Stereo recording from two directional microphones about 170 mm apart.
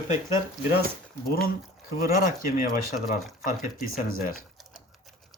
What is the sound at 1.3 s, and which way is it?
Speech, 60° left (ahead or behind).